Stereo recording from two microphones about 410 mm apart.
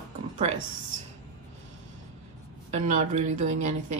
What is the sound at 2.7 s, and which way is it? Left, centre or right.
Speech, centre.